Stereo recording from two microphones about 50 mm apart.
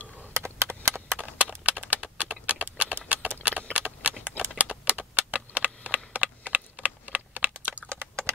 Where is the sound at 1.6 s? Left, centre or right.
Right.